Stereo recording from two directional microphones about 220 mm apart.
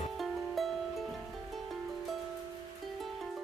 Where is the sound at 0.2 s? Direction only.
Centre (ahead or behind).